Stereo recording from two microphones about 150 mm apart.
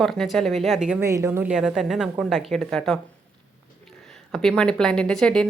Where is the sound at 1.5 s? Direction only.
5° right (ahead or behind).